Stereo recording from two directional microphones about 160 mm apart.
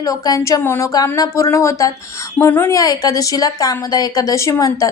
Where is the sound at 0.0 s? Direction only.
20° left (ahead or behind).